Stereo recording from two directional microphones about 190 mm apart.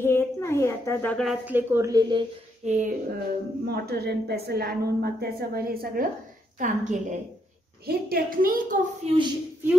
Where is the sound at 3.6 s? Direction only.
55° right (ahead or behind).